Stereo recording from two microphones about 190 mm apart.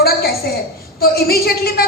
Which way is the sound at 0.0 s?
55° left (ahead or behind).